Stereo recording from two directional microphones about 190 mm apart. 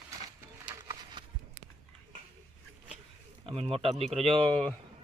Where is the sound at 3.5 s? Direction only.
30° right (ahead or behind).